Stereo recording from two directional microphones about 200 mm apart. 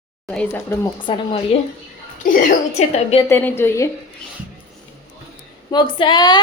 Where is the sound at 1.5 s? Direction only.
30° left (ahead or behind).